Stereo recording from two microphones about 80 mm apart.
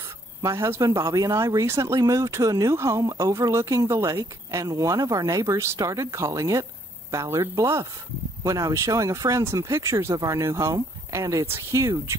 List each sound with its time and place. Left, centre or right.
0.4 s speech: right